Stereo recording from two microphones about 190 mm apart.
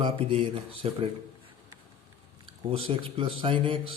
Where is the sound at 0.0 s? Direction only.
30° right (ahead or behind).